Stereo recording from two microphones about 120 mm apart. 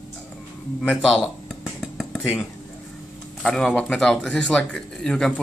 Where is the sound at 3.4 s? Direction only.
5° left (ahead or behind).